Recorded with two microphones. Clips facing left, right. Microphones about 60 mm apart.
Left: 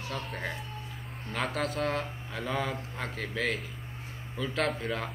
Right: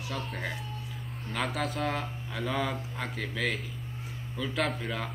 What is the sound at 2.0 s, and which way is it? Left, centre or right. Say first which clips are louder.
Speech: even; centre.